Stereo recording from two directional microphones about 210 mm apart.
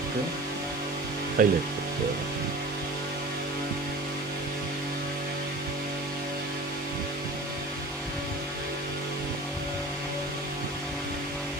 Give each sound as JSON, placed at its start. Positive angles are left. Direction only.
{"t": 1.4, "sound": "speech", "side_deg": -40}